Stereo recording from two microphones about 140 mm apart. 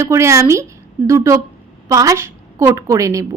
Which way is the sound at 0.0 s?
20° right (ahead or behind).